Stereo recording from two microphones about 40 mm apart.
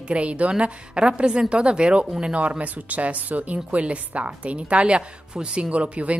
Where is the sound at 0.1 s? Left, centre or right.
Right.